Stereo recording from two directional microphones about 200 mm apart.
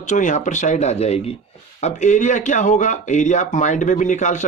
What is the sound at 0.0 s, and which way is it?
Speech, 40° left (ahead or behind).